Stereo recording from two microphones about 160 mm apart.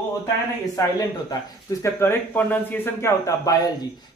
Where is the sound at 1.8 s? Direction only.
10° left (ahead or behind).